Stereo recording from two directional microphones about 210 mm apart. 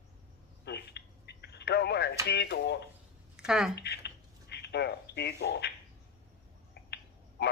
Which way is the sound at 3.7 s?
50° left (ahead or behind).